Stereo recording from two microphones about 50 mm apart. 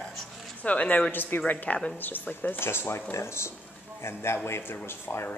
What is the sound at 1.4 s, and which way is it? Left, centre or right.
A woman's voice, left.